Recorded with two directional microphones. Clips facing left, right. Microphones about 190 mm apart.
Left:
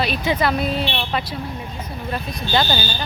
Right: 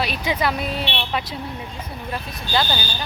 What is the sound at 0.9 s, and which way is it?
Speech, 65° right (ahead or behind).